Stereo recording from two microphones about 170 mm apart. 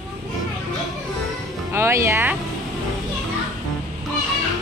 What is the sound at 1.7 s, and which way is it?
Speech, 15° right (ahead or behind).